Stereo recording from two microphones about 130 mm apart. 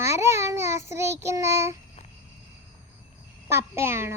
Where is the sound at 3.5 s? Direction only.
20° right (ahead or behind).